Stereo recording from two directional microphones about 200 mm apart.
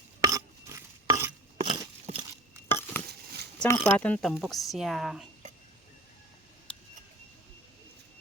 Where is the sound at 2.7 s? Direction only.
10° left (ahead or behind).